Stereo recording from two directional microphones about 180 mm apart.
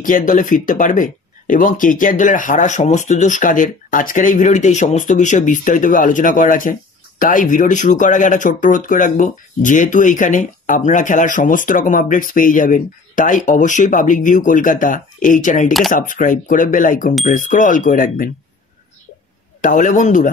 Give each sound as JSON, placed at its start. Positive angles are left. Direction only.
{"t": 0.0, "sound": "speech", "side_deg": 50}
{"t": 19.6, "sound": "speech", "side_deg": 45}